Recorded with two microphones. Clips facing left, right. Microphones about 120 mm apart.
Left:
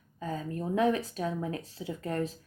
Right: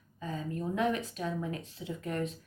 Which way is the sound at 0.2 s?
35° left (ahead or behind).